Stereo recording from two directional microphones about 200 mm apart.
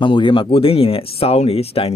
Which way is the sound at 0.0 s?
25° left (ahead or behind).